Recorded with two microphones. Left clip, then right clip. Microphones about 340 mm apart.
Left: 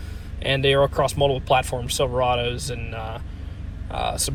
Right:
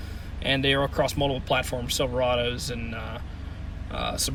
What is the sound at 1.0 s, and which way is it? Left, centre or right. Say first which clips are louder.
Speech: left 5 dB; centre.